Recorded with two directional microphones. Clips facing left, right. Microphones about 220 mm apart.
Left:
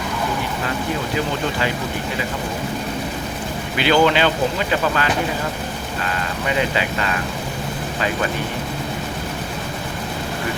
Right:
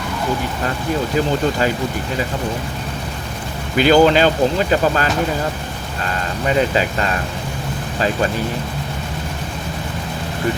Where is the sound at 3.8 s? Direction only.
40° right (ahead or behind).